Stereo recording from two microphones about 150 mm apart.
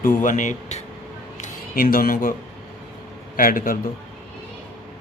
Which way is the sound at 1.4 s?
70° left (ahead or behind).